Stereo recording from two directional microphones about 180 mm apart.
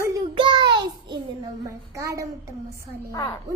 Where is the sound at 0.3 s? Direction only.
25° right (ahead or behind).